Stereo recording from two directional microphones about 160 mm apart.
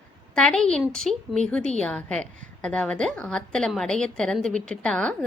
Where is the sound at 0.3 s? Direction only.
5° left (ahead or behind).